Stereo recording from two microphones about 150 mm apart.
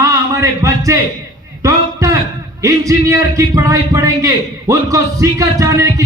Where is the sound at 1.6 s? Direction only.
20° right (ahead or behind).